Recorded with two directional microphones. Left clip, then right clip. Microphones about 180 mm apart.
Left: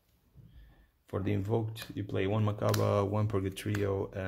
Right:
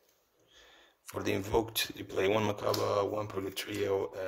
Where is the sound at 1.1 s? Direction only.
20° right (ahead or behind).